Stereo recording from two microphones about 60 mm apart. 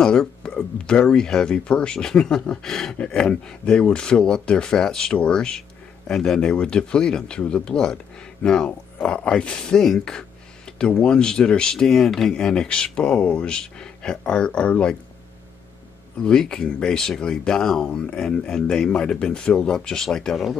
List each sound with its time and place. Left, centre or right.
0.0 s speech: centre
16.2 s speech: centre